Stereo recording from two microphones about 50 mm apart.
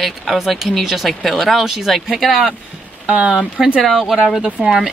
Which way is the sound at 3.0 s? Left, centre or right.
Right.